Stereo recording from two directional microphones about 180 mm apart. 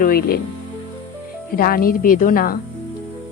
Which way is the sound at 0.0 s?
55° left (ahead or behind).